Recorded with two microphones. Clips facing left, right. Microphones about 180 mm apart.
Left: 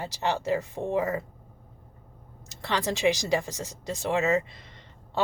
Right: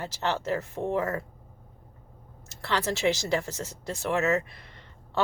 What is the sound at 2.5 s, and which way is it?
Speech, 15° left (ahead or behind).